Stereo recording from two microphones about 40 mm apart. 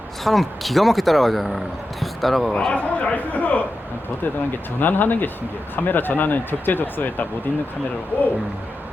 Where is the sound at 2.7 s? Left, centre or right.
Left.